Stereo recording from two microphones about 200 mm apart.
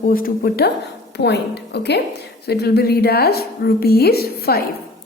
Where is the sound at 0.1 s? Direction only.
45° left (ahead or behind).